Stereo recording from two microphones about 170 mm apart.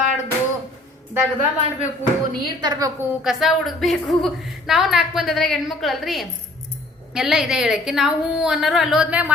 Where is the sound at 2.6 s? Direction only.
25° right (ahead or behind).